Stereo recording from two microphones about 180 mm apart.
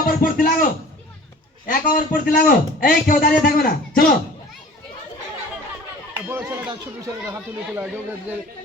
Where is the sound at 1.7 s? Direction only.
50° left (ahead or behind).